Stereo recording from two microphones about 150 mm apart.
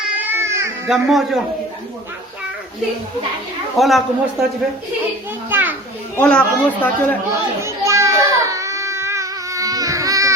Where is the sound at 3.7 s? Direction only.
Centre (ahead or behind).